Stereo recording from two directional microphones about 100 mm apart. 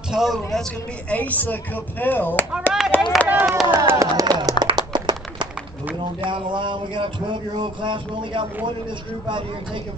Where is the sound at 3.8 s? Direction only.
35° right (ahead or behind).